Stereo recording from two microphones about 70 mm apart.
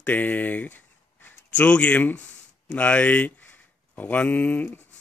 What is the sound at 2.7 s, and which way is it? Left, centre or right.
Speech, centre.